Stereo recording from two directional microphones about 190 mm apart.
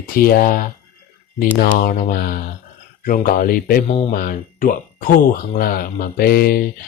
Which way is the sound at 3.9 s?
30° left (ahead or behind).